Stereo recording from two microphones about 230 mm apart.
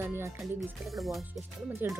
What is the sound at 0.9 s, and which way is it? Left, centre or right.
Speech, centre.